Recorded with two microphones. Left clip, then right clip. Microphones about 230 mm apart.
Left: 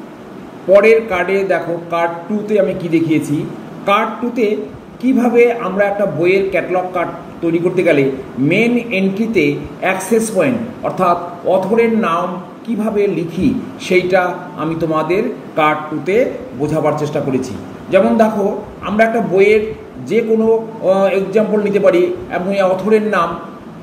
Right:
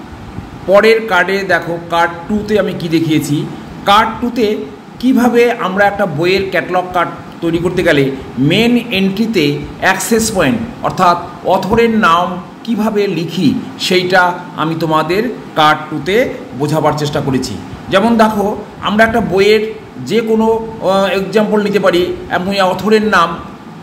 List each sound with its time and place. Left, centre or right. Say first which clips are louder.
0.7 s a man's voice: right 2 dB; right